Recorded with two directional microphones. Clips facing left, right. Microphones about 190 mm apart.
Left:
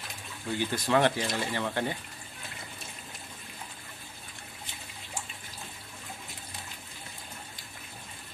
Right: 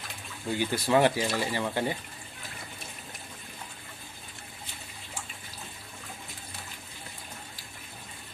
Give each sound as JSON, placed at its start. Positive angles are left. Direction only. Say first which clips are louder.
{"t": 0.6, "sound": "speech", "louder": "right 2 dB", "side_deg": -10}